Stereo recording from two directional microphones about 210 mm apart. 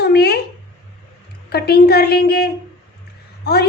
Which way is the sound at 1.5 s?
50° left (ahead or behind).